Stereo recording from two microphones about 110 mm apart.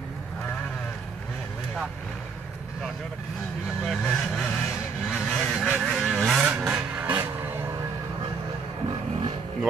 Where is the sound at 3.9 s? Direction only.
5° left (ahead or behind).